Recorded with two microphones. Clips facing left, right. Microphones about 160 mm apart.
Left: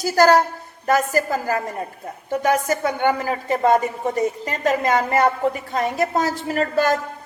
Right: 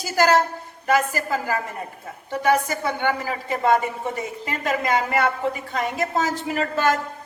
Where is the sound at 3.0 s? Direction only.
45° left (ahead or behind).